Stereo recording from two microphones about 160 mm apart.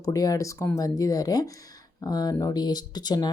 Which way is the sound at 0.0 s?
20° left (ahead or behind).